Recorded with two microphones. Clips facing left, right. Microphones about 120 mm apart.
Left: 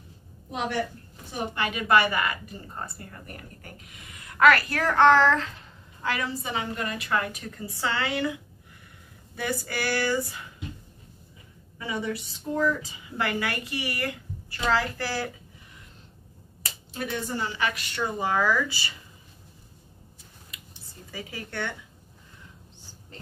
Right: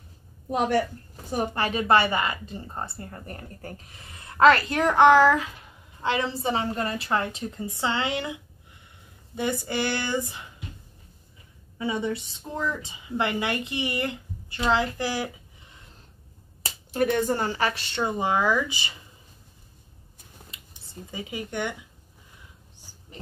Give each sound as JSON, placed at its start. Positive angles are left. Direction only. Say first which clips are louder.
{"t": 0.5, "sound": "a woman's voice", "louder": "right 5 dB", "side_deg": -45}
{"t": 6.0, "sound": "a woman's voice", "louder": "right 4 dB", "side_deg": -25}
{"t": 11.8, "sound": "a woman's voice", "louder": "right 3 dB", "side_deg": -25}
{"t": 16.9, "sound": "a woman's voice", "louder": "right 8 dB", "side_deg": -55}
{"t": 21.1, "sound": "speech", "louder": "right 4 dB", "side_deg": -20}
{"t": 22.8, "sound": "a sound", "louder": "left 1 dB", "side_deg": -15}